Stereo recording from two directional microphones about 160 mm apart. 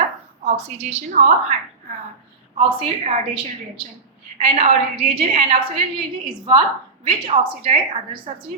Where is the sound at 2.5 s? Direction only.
35° right (ahead or behind).